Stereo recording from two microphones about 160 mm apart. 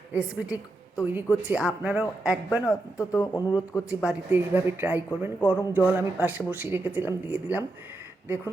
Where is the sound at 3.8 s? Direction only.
5° right (ahead or behind).